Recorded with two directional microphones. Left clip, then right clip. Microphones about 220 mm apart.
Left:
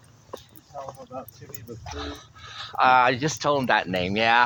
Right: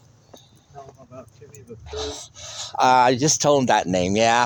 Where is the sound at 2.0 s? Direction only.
45° right (ahead or behind).